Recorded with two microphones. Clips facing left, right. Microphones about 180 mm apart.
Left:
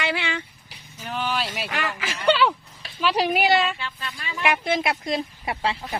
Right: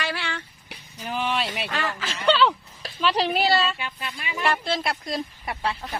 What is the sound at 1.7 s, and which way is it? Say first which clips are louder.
Speech: even; 15° left (ahead or behind).